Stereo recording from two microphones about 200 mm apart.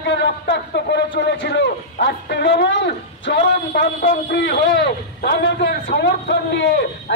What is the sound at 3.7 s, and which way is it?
A man's voice, 45° left (ahead or behind).